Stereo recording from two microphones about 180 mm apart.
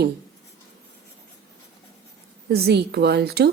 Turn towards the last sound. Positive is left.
turn(degrees=-60)  # may be behind; listen again after turning